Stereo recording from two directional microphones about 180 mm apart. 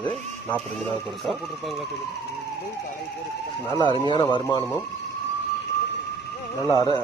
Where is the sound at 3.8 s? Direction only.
25° left (ahead or behind).